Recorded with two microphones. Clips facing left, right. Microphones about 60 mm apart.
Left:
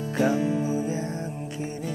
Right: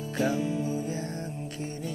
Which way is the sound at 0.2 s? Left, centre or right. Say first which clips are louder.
Left 4 dB; left.